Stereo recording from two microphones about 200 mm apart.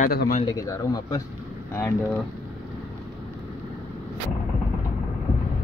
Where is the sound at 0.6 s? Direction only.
15° left (ahead or behind).